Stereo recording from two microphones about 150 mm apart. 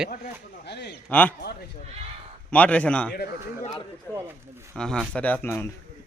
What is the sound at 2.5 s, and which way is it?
Speech, 10° left (ahead or behind).